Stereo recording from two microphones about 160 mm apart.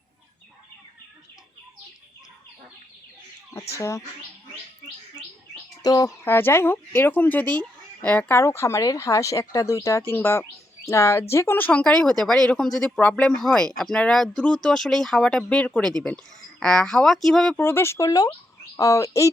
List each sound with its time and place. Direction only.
3.8 s speech: 20° left (ahead or behind)
5.8 s speech: 25° left (ahead or behind); by 17.6 s 5° left (ahead or behind)
17.6 s speech: 15° left (ahead or behind)